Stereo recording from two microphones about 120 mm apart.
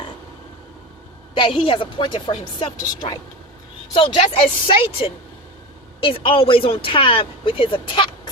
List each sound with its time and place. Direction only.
1.4 s speech: 45° left (ahead or behind)
4.2 s speech: 50° left (ahead or behind)